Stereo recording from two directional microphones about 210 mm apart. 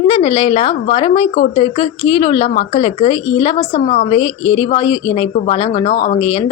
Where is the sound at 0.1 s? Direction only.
25° left (ahead or behind).